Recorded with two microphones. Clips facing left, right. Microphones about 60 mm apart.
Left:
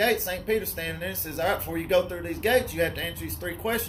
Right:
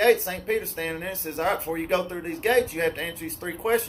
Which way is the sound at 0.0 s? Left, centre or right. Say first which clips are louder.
Right 4 dB; right.